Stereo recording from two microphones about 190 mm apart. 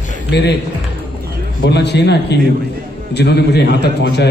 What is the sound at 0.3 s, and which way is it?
Speech, 60° left (ahead or behind).